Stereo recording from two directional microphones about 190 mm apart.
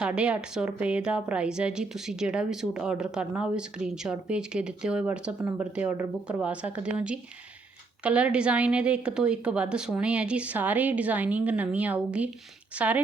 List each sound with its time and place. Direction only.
0.0 s a woman's voice: 5° right (ahead or behind)